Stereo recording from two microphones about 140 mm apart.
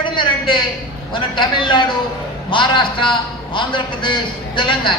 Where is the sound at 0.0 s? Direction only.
35° left (ahead or behind).